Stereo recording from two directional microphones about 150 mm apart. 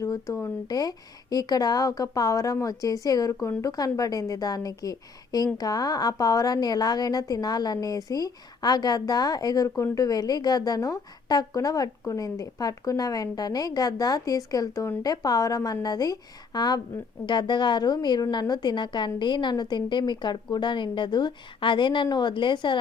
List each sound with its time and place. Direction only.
0.0 s a woman's voice: 20° left (ahead or behind)